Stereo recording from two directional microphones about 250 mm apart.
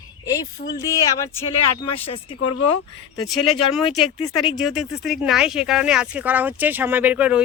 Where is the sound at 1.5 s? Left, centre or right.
Left.